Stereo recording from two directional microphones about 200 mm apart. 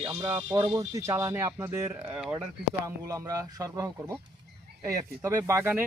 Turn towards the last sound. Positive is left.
turn(degrees=-10)  # may be behind; listen again after turning